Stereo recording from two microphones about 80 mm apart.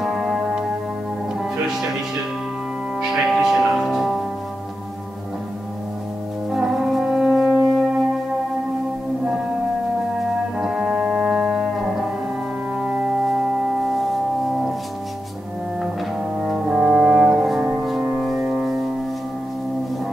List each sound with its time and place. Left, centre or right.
0.0 s music: centre
3.0 s music: centre
6.5 s music: centre
10.1 s music: centre
16.2 s brass instrument: centre
18.2 s music: centre